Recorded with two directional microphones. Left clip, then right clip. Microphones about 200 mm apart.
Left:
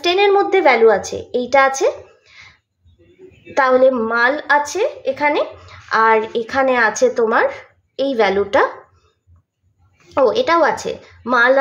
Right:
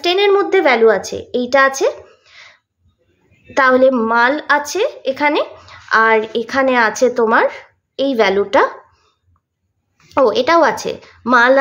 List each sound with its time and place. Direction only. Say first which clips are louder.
0.0 s a woman's voice: right 1 dB; 15° right (ahead or behind)
10.1 s a woman's voice: right 2 dB; 20° right (ahead or behind)